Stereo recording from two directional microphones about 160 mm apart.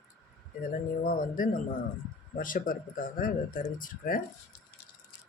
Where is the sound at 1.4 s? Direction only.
60° left (ahead or behind).